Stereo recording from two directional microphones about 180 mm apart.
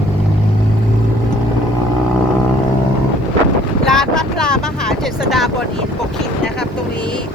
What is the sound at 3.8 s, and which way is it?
Wind noise, 5° left (ahead or behind).